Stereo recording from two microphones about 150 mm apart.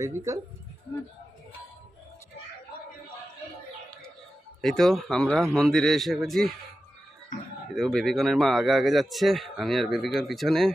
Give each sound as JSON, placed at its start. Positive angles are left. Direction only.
{"t": 0.0, "sound": "speech", "side_deg": -20}
{"t": 4.6, "sound": "speech", "side_deg": 0}
{"t": 7.7, "sound": "speech", "side_deg": 0}